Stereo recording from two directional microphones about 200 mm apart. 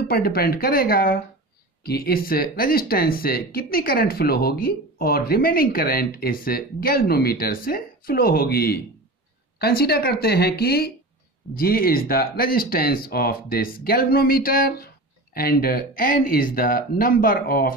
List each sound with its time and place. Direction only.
0.1 s speech: 50° left (ahead or behind)